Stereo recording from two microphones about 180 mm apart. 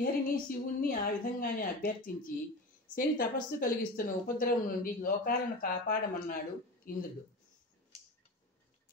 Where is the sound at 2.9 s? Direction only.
50° left (ahead or behind).